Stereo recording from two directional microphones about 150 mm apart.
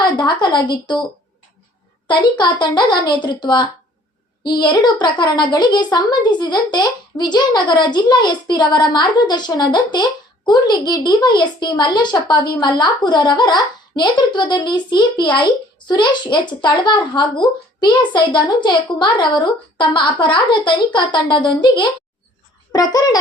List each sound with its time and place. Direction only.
0.0 s speech: 30° left (ahead or behind)
2.0 s a woman's voice: 30° left (ahead or behind)